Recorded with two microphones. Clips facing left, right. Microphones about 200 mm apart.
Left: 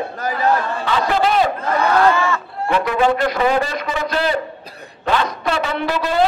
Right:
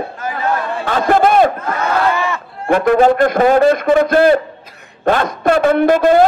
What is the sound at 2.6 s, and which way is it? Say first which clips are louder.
A man's voice: right 6 dB; 50° right (ahead or behind).